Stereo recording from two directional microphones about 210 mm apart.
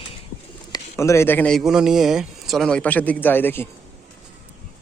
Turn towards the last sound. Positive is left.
turn(degrees=10)  # may be behind; listen again after turning